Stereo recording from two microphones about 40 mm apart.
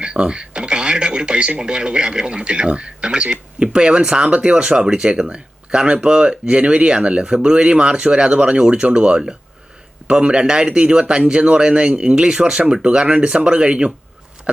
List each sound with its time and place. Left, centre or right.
0.0 s speech: right